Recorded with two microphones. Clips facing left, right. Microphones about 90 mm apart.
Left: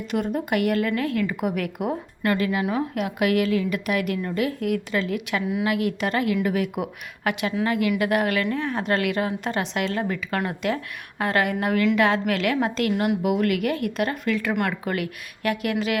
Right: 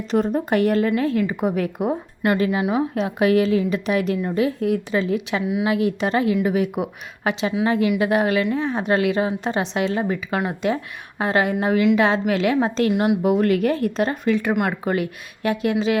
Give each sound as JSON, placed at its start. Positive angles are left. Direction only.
{"t": 0.1, "sound": "a woman's voice", "side_deg": -30}